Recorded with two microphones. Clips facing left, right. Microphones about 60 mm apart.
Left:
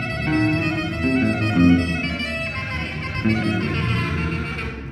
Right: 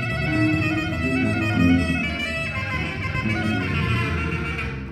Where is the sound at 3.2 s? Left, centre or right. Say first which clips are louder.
Left 4 dB; centre.